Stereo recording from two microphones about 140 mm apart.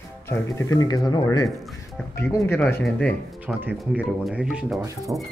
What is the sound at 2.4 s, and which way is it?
Speech, 15° left (ahead or behind).